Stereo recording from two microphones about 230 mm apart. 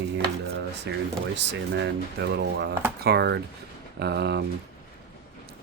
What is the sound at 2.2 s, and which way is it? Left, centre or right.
Speech, right.